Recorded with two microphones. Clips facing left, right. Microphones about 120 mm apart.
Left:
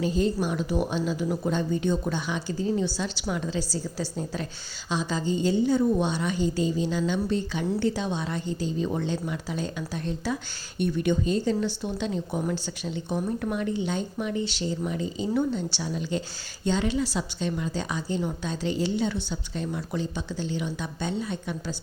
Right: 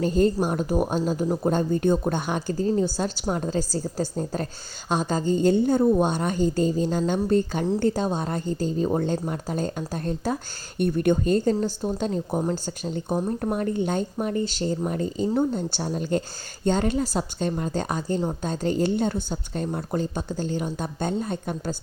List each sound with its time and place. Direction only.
0.0 s a woman's voice: 50° right (ahead or behind)